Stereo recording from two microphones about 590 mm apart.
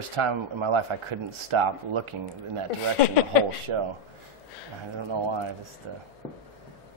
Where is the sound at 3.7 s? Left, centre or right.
Right.